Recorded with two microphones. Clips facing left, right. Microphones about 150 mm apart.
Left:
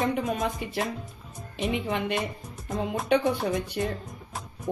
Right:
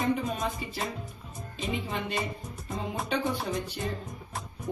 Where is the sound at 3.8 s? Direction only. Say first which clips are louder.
Left 3 dB; centre (ahead or behind).